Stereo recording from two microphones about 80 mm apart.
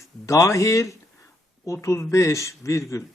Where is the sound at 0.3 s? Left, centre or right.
Left.